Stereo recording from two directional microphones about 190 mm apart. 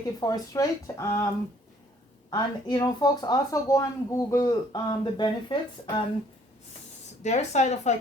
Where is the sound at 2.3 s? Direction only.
20° left (ahead or behind).